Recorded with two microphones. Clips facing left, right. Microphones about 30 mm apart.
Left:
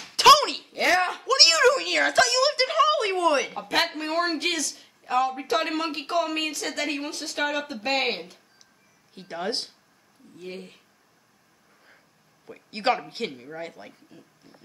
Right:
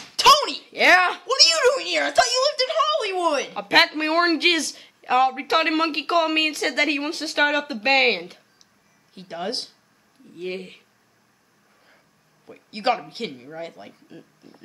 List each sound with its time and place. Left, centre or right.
0.0 s a sound: centre
0.7 s speech: right
1.2 s speech: centre
3.5 s speech: right
9.1 s speech: centre
10.3 s speech: right
12.4 s speech: centre